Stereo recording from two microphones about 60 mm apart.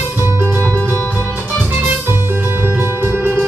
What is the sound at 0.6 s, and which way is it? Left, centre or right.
Music, left.